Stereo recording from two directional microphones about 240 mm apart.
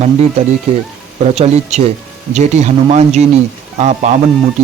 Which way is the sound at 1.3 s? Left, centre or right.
Right.